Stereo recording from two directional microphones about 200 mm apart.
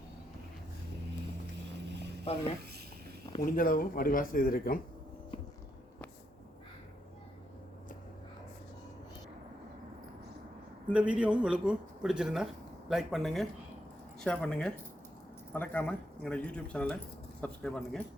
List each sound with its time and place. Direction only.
2.2 s speech: 30° left (ahead or behind)
3.4 s speech: 45° left (ahead or behind)
10.9 s a man's voice: 5° right (ahead or behind)